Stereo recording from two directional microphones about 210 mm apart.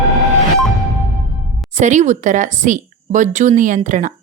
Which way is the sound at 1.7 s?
35° right (ahead or behind).